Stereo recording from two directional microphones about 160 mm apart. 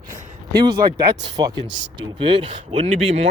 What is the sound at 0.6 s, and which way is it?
Speech, 25° right (ahead or behind).